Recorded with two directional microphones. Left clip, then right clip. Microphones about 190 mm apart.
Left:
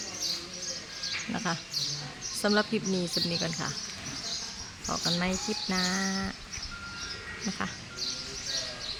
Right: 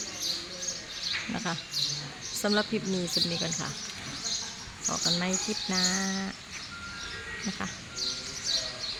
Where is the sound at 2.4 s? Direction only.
5° left (ahead or behind).